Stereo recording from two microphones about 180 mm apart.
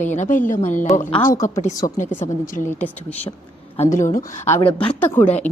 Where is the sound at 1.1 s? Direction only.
15° left (ahead or behind).